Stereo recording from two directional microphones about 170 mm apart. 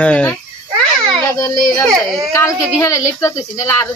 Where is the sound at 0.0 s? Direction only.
10° left (ahead or behind).